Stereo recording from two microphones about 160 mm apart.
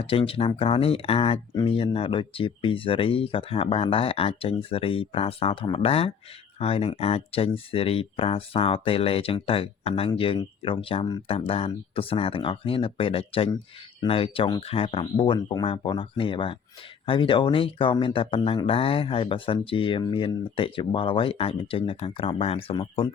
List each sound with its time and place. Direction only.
0.0 s speech: 35° left (ahead or behind)